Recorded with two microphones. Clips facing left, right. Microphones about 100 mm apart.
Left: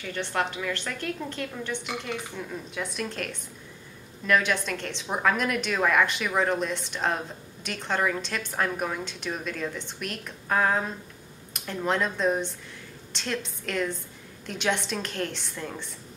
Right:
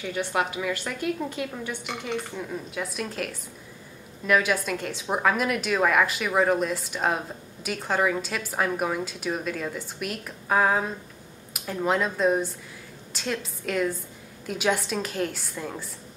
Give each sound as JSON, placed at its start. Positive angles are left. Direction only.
{"t": 0.0, "sound": "a woman's voice", "side_deg": -10}